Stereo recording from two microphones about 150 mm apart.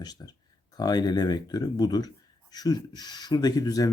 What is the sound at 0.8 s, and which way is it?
A man's voice, 25° left (ahead or behind).